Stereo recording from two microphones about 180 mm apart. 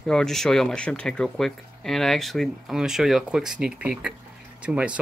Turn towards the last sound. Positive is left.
turn(degrees=-5)  # may be behind; listen again after turning